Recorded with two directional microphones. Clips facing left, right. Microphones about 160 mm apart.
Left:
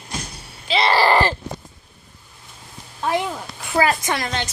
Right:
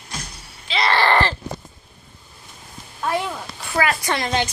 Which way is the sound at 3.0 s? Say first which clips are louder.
Left 1 dB; 15° left (ahead or behind).